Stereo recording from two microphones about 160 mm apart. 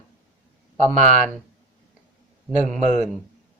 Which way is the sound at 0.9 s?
50° right (ahead or behind).